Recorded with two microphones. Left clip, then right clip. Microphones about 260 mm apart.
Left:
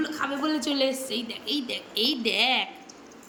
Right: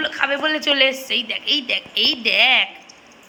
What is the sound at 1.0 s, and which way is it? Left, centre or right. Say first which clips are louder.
A woman's voice: right 10 dB; centre.